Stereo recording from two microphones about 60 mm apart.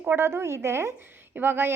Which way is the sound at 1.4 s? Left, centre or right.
Right.